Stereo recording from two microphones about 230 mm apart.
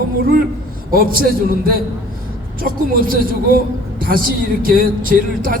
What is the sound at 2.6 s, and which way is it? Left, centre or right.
A man's voice, right.